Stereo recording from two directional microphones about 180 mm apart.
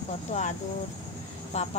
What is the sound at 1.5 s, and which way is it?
Speech, 40° left (ahead or behind).